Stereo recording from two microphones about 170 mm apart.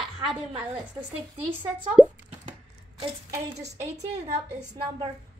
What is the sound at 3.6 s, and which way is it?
Speech, 40° right (ahead or behind).